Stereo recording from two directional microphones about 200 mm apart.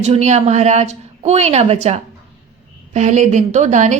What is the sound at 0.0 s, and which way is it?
A woman's voice, 35° right (ahead or behind).